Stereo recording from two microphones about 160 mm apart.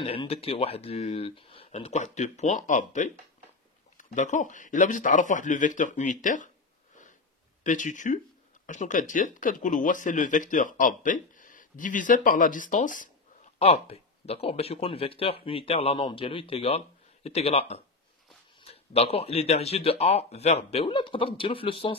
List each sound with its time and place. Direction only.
0.0 s speech: 35° left (ahead or behind); by 6.5 s 55° left (ahead or behind)
7.6 s speech: 50° left (ahead or behind)
13.6 s speech: 40° left (ahead or behind)